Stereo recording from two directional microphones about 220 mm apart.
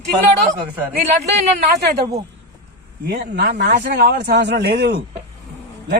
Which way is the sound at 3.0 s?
45° right (ahead or behind).